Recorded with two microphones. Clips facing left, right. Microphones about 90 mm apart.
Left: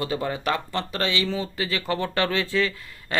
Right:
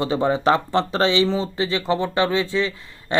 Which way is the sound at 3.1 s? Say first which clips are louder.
Right 5 dB; 25° right (ahead or behind).